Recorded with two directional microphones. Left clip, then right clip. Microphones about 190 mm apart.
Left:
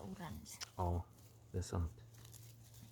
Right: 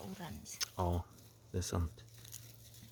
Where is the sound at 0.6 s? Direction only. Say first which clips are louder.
Right 5 dB; 30° right (ahead or behind).